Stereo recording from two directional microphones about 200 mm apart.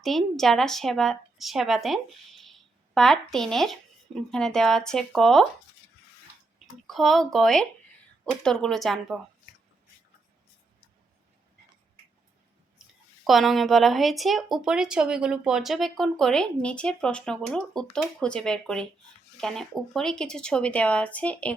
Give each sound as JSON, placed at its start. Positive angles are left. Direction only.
{"t": 0.0, "sound": "speech", "side_deg": 0}
{"t": 6.8, "sound": "speech", "side_deg": 0}
{"t": 13.2, "sound": "speech", "side_deg": 0}